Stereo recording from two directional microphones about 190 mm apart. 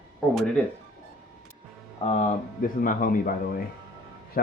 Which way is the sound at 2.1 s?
45° left (ahead or behind).